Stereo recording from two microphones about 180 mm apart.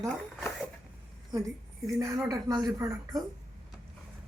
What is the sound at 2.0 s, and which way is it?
Speech, 15° right (ahead or behind).